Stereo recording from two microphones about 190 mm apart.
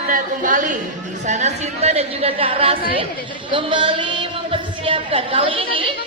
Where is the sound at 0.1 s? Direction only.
45° right (ahead or behind).